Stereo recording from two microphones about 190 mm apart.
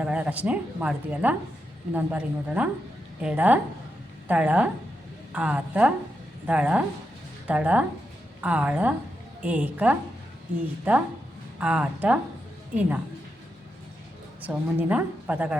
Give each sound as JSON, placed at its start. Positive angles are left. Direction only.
{"t": 0.0, "sound": "a woman's voice", "side_deg": -5}
{"t": 14.4, "sound": "a woman's voice", "side_deg": -10}